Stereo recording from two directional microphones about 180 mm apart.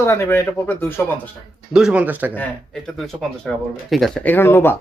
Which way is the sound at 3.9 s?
Centre (ahead or behind).